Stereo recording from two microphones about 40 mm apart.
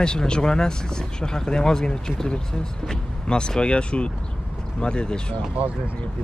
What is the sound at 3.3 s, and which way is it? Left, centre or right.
Speech, left.